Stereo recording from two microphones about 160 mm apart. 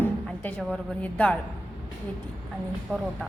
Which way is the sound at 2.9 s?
5° left (ahead or behind).